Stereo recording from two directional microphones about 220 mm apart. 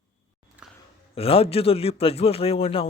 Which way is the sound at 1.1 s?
25° left (ahead or behind).